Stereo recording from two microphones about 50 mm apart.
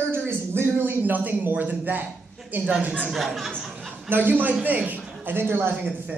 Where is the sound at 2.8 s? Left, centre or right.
Right.